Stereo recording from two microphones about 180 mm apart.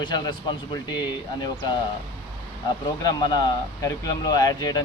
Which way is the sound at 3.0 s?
25° left (ahead or behind).